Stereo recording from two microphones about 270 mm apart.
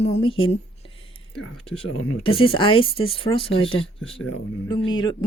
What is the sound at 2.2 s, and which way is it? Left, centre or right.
Speech, centre.